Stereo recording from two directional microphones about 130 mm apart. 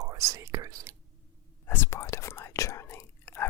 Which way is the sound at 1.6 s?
20° left (ahead or behind).